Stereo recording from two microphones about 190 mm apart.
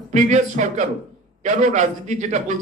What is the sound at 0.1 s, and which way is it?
A man's voice, 40° right (ahead or behind).